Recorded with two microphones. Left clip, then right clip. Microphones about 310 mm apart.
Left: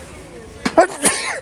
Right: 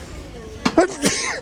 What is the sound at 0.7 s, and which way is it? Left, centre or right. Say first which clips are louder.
Cough: left 4 dB; centre.